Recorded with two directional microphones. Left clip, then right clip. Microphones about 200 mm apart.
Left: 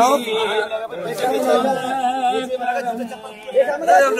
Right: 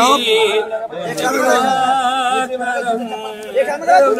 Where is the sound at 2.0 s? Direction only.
45° right (ahead or behind).